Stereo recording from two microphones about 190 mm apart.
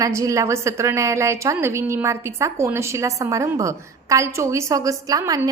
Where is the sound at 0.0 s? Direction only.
15° right (ahead or behind).